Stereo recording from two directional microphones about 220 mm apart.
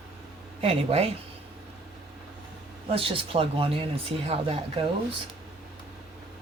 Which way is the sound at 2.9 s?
25° right (ahead or behind).